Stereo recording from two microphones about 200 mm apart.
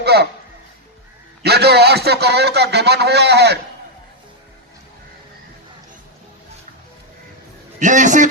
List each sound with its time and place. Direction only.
0.0 s a sound: 55° right (ahead or behind)
1.4 s a man's voice: 55° right (ahead or behind)
7.8 s a man's voice: 40° right (ahead or behind)